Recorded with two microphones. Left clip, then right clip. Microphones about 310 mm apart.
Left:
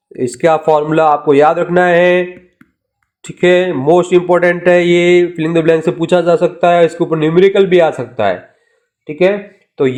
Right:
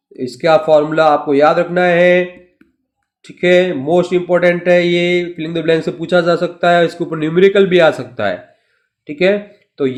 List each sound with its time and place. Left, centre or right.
0.3 s speech: centre
3.3 s speech: centre